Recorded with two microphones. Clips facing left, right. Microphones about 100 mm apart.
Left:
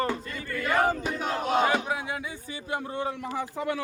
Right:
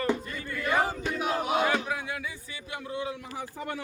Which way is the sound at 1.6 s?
25° left (ahead or behind).